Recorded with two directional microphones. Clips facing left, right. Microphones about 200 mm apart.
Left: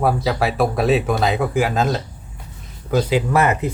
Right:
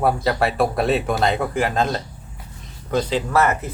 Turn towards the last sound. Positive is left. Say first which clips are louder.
# left 2 dB
turn(degrees=15)  # may be behind; listen again after turning